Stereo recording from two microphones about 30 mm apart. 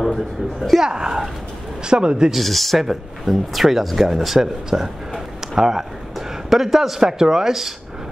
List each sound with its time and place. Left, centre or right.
0.0 s speech: centre
0.7 s speech: right
2.3 s speech: centre
2.8 s speech: centre
6.1 s a sound: centre
7.1 s speech: centre